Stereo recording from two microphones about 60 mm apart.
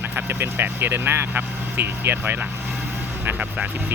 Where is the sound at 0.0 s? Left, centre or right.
Right.